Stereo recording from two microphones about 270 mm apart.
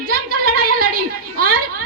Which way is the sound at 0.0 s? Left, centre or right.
Right.